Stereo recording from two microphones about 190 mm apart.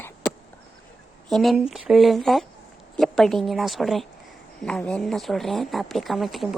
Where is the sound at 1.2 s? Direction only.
Centre (ahead or behind).